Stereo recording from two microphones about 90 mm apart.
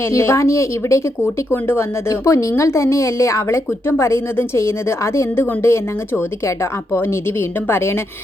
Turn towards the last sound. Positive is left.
turn(degrees=25)  # may be behind; listen again after turning